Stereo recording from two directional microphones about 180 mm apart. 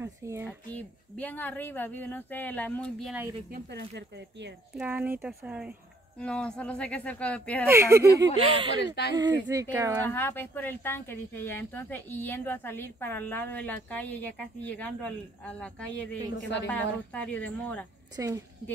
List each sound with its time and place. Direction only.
0.0 s speech: 15° right (ahead or behind)
0.5 s speech: 10° left (ahead or behind)
3.5 s speech: 70° right (ahead or behind)
4.7 s speech: 10° right (ahead or behind)
6.1 s speech: 5° left (ahead or behind)
7.6 s speech: 15° right (ahead or behind)
8.5 s speech: 30° right (ahead or behind)
10.0 s speech: 10° left (ahead or behind)
18.1 s speech: 20° right (ahead or behind)